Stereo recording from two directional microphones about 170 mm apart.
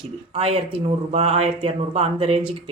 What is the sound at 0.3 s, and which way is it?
A woman's voice, 35° right (ahead or behind).